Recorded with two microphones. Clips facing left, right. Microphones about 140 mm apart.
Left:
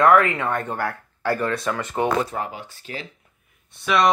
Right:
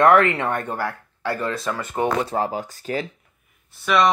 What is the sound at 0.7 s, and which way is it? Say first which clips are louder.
Speech: even; 5° right (ahead or behind).